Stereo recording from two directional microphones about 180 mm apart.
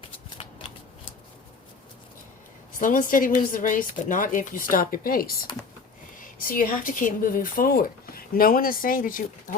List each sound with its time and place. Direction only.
2.7 s speech: 50° left (ahead or behind)